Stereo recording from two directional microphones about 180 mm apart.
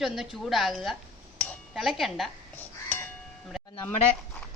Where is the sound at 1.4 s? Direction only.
Centre (ahead or behind).